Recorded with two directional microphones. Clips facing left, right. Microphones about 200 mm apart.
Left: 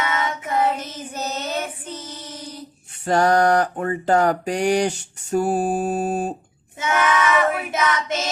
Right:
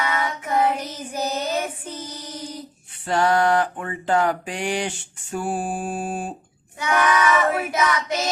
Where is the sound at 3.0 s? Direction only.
45° left (ahead or behind).